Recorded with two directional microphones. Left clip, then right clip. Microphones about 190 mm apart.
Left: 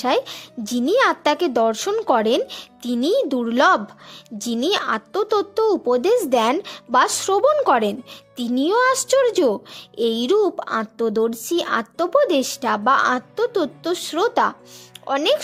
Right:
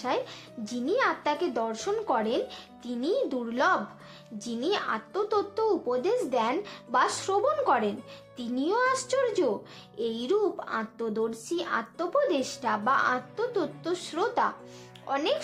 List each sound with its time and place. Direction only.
0.0 s a child's voice: 60° left (ahead or behind)